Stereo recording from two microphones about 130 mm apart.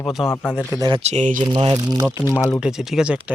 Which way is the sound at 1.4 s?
35° right (ahead or behind).